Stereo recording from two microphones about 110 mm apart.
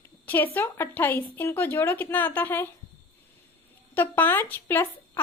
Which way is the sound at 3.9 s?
15° left (ahead or behind).